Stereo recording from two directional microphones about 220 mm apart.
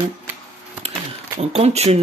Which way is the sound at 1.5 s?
30° right (ahead or behind).